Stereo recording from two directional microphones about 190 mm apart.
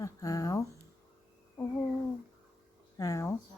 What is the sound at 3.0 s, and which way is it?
Speech, 15° left (ahead or behind).